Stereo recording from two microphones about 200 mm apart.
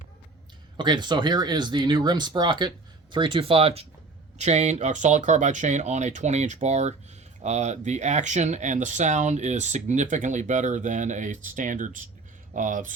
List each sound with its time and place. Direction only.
0.8 s speech: 20° right (ahead or behind); by 12.9 s 40° right (ahead or behind)